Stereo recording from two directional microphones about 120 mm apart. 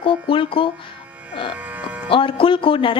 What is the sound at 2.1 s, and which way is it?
Speech, 45° left (ahead or behind).